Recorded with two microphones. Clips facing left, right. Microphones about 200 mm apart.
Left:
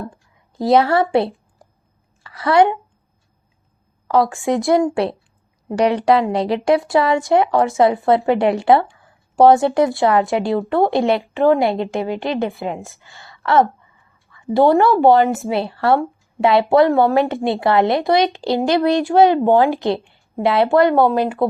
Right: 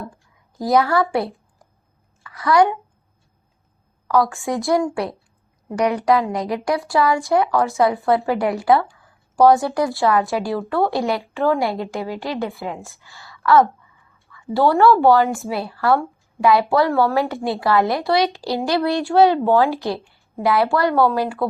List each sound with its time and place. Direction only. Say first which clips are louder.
0.6 s speech: left 3 dB; 30° left (ahead or behind)
2.2 s a woman's voice: left 2 dB; 25° left (ahead or behind)
4.1 s a woman's voice: left 3 dB; 20° left (ahead or behind)
14.3 s a sound: left 5 dB; 30° left (ahead or behind)
14.5 s speech: left 2 dB; 20° left (ahead or behind)